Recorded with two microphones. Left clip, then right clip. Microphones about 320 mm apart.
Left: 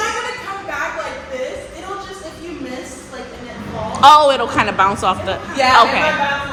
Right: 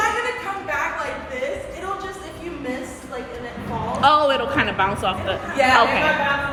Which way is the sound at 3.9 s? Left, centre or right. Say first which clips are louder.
Left 8 dB; centre.